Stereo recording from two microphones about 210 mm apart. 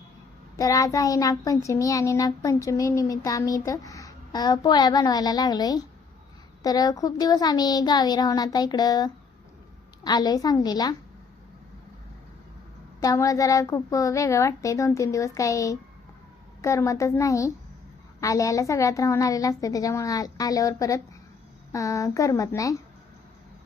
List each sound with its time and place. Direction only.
0.5 s child singing: 15° left (ahead or behind)
6.6 s a child's voice: 20° left (ahead or behind)
13.0 s child singing: 15° left (ahead or behind)